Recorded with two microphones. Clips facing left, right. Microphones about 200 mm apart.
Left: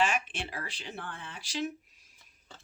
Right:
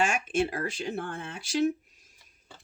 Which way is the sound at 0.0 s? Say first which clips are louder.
Right 4 dB; 45° right (ahead or behind).